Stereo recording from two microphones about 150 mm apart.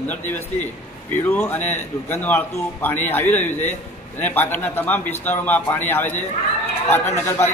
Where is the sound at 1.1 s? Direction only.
10° left (ahead or behind).